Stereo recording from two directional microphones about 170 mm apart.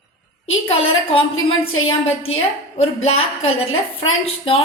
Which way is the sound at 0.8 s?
35° left (ahead or behind).